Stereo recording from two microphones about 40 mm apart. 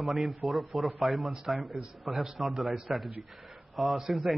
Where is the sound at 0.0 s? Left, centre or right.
Centre.